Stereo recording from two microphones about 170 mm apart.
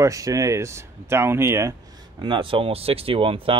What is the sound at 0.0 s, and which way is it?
Speech, 20° right (ahead or behind).